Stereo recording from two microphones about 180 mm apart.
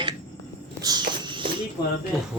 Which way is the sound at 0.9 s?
25° right (ahead or behind).